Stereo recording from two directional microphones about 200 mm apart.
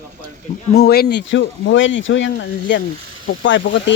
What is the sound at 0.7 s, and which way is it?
Speech, 50° left (ahead or behind).